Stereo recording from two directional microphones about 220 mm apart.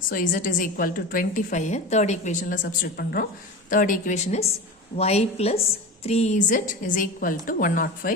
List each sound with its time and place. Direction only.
0.1 s a woman's voice: 40° left (ahead or behind)